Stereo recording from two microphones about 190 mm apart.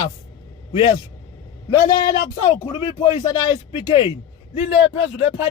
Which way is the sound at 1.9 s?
25° left (ahead or behind).